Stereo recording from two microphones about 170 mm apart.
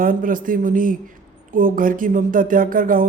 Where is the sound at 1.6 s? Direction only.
55° right (ahead or behind).